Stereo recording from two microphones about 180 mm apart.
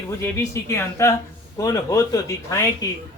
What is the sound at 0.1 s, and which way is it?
Speech, 15° left (ahead or behind).